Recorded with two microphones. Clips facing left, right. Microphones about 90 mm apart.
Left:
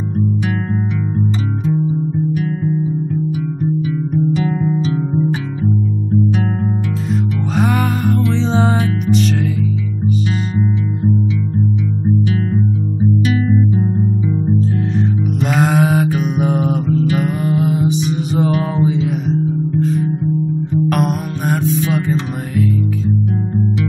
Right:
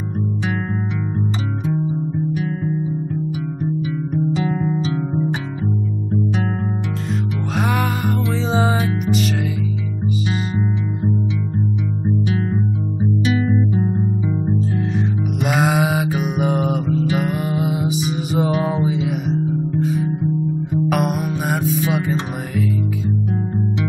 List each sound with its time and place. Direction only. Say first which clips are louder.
4.4 s music: left 2 dB; 20° right (ahead or behind)
7.5 s music: left 3 dB; centre (ahead or behind)
13.2 s music: even; 20° right (ahead or behind)
15.0 s music: left 4 dB; 5° right (ahead or behind)
18.5 s mantra: left 1 dB; 15° right (ahead or behind)
18.8 s music: left 3 dB; 5° right (ahead or behind)